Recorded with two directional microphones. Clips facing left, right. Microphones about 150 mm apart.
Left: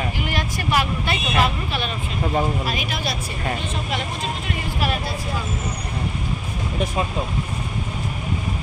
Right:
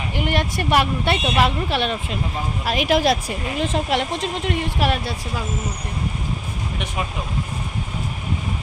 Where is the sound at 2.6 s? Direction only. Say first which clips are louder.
Right 8 dB; 90° right.